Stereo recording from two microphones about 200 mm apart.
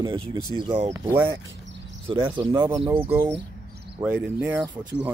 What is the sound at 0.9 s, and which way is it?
Speech, 10° right (ahead or behind).